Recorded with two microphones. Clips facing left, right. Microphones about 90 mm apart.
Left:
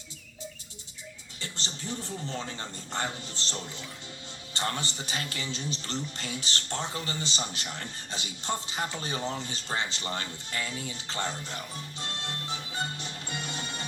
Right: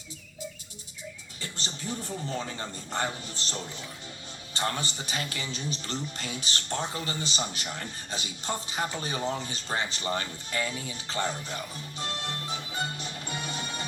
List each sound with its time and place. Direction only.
1.9 s a man's voice: 15° right (ahead or behind)
12.5 s music: 15° right (ahead or behind)